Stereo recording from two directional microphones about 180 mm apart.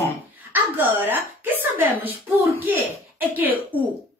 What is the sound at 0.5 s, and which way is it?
A woman's voice, 10° right (ahead or behind).